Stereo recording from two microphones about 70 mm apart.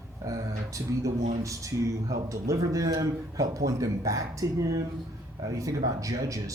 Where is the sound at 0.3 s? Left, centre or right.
Right.